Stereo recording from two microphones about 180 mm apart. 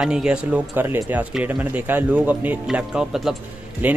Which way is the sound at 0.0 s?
5° right (ahead or behind).